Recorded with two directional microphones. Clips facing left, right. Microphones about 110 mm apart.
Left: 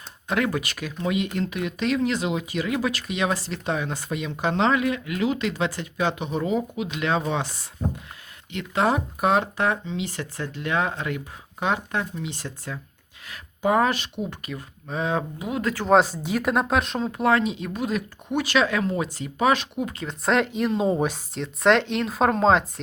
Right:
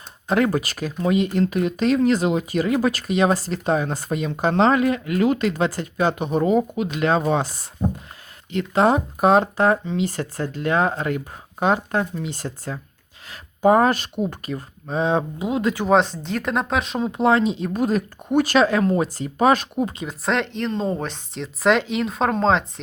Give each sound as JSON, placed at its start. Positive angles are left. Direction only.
{"t": 0.3, "sound": "speech", "side_deg": -35}
{"t": 9.8, "sound": "speech", "side_deg": -50}
{"t": 15.9, "sound": "speech", "side_deg": 5}
{"t": 17.0, "sound": "speech", "side_deg": -20}
{"t": 20.1, "sound": "speech", "side_deg": 0}